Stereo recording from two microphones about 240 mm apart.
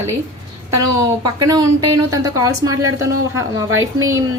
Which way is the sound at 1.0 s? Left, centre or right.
Centre.